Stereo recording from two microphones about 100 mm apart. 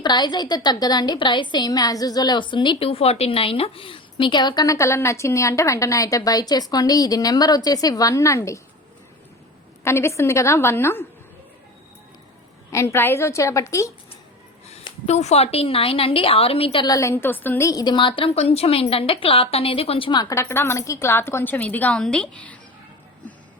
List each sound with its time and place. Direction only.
0.0 s a woman's voice: 45° left (ahead or behind)
9.8 s a woman's voice: 25° left (ahead or behind)
12.7 s a woman's voice: 25° left (ahead or behind)
15.0 s a woman's voice: 90° left; by 16.8 s 70° left (ahead or behind)
16.8 s a woman's voice: 35° left (ahead or behind); by 17.7 s 20° left (ahead or behind)
17.7 s a woman's voice: 40° left (ahead or behind)
18.2 s a woman's voice: 75° left (ahead or behind)
20.3 s a woman's voice: 25° left (ahead or behind); by 22.5 s 10° left (ahead or behind)